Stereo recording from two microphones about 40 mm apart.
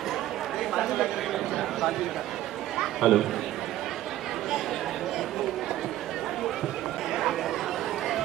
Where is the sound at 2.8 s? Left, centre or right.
Centre.